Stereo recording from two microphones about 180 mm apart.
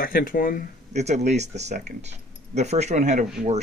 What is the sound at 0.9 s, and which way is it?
Speech, 40° right (ahead or behind).